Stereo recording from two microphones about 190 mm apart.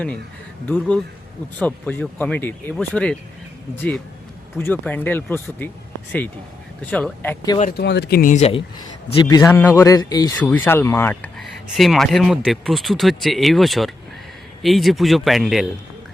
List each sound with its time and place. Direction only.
0.7 s speech: 5° left (ahead or behind)
7.8 s speech: 60° left (ahead or behind)
8.2 s speech: 40° left (ahead or behind)
9.3 s speech: 10° left (ahead or behind)